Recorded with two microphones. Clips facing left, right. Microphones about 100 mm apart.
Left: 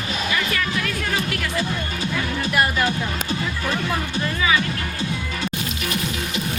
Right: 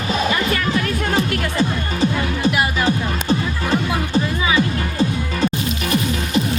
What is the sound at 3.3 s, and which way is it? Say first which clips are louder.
Music: right 9 dB; 35° right (ahead or behind).